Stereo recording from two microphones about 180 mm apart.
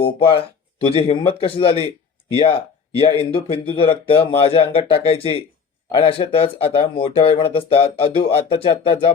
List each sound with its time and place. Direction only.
0.0 s speech: 30° left (ahead or behind)